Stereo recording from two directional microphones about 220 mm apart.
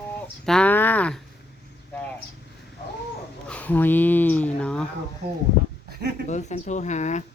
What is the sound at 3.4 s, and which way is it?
Speech, 5° left (ahead or behind).